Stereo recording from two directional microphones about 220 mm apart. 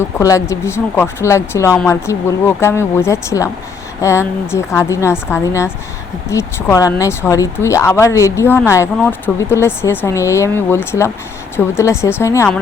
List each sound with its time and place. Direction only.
0.0 s speech: 15° left (ahead or behind)